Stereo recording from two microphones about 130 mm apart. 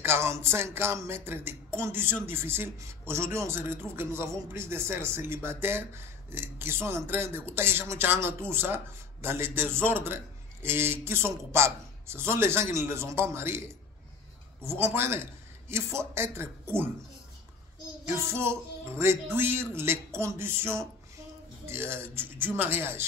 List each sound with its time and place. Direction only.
0.0 s speech: 20° right (ahead or behind)
14.6 s speech: 20° right (ahead or behind)
18.3 s speech: 20° right (ahead or behind)